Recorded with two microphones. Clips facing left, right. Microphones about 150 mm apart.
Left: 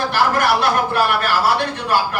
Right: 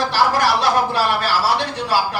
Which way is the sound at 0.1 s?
55° left (ahead or behind).